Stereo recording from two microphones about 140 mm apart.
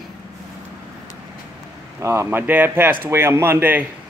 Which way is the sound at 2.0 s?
20° right (ahead or behind).